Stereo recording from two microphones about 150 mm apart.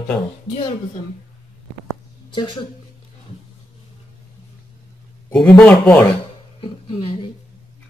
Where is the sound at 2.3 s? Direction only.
30° left (ahead or behind).